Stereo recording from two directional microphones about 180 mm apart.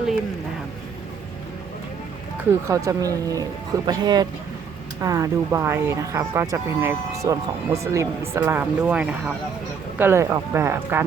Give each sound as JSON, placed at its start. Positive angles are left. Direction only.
{"t": 2.4, "sound": "speech", "side_deg": -15}